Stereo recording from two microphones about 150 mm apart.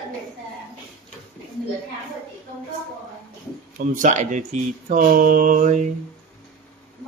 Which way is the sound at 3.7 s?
60° right (ahead or behind).